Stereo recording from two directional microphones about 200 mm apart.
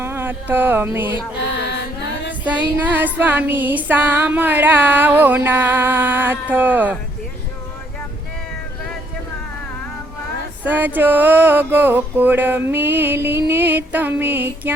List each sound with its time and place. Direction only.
0.0 s a sound: 10° right (ahead or behind)
1.4 s music: 60° left (ahead or behind)
2.4 s female singing: 5° right (ahead or behind)
10.6 s female singing: 10° right (ahead or behind)